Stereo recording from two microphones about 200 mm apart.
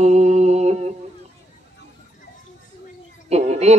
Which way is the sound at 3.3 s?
35° right (ahead or behind).